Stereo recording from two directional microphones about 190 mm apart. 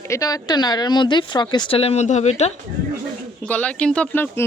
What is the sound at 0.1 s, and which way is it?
Speech, 20° left (ahead or behind).